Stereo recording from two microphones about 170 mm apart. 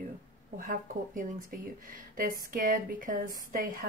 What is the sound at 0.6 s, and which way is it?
A woman's voice, 50° right (ahead or behind).